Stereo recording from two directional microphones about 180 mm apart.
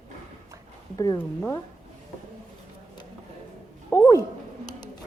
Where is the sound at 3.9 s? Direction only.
15° left (ahead or behind).